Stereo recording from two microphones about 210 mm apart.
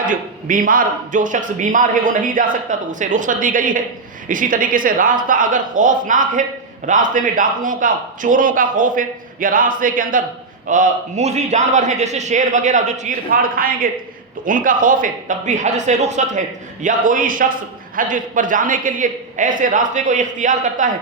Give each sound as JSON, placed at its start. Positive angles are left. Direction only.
{"t": 0.0, "sound": "speech", "side_deg": -40}